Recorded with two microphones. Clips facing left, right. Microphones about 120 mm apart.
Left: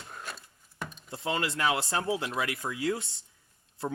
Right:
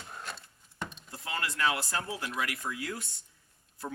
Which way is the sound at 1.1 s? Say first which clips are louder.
Left 7 dB; 25° left (ahead or behind).